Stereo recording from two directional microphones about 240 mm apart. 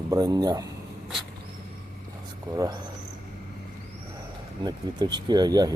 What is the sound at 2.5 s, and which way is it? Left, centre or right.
Speech, centre.